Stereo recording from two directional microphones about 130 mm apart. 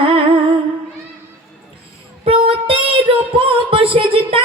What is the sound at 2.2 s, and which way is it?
Music, 45° right (ahead or behind).